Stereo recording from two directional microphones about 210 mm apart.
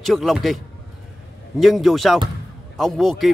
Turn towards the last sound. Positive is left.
turn(degrees=0)  # may be behind; listen again after turning